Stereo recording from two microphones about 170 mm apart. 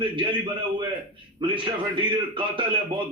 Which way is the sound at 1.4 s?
30° right (ahead or behind).